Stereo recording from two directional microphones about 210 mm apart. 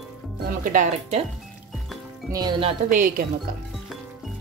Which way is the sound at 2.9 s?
40° right (ahead or behind).